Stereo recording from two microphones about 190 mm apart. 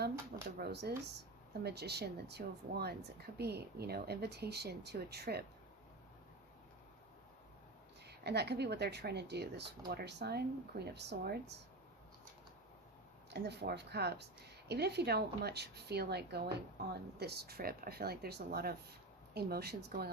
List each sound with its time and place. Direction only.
0.6 s speech: 60° right (ahead or behind)
8.0 s speech: 60° right (ahead or behind)
13.3 s speech: 60° right (ahead or behind)